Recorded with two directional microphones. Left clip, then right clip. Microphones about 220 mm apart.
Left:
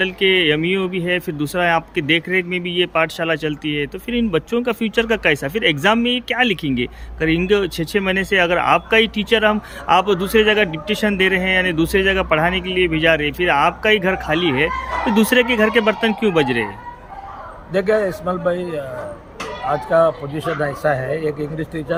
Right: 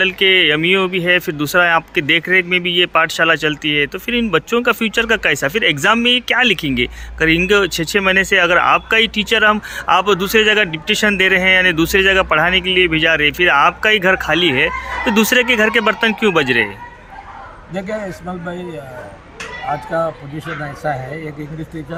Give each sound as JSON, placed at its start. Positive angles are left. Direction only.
{"t": 0.0, "sound": "speech", "side_deg": 5}
{"t": 17.7, "sound": "a man's voice", "side_deg": 20}